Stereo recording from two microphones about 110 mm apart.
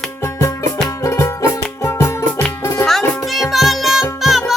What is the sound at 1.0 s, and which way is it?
Music, 30° left (ahead or behind).